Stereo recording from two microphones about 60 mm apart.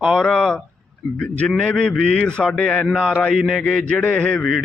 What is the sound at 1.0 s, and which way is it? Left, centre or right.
Speech, centre.